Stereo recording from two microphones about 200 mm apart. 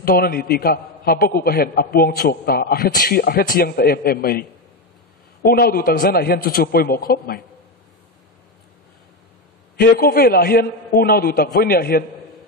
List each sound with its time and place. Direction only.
0.0 s a man's voice: 45° left (ahead or behind)
9.8 s a man's voice: 45° left (ahead or behind)